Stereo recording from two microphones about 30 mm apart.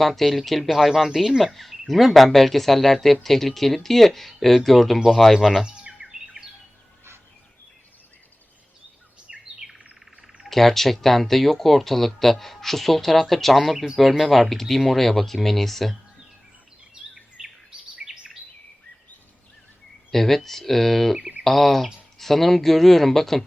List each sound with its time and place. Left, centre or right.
0.2 s speech: centre
5.3 s speech: centre
5.6 s a sound: right
9.3 s bird: centre
10.5 s speech: centre
13.7 s speech: centre
17.4 s chirp: right
20.1 s speech: centre
21.2 s a sound: right
21.4 s speech: centre